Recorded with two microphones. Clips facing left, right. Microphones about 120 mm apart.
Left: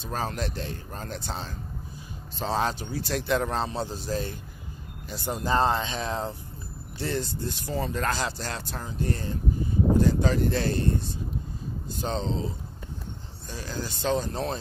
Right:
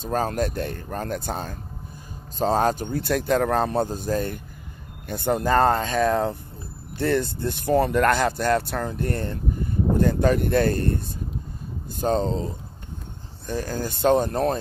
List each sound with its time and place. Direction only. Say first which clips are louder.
0.0 s speech: right 7 dB; 45° right (ahead or behind)
13.5 s speech: right 7 dB; 50° right (ahead or behind)